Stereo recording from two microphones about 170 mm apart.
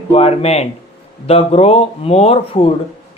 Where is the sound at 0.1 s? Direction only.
35° left (ahead or behind).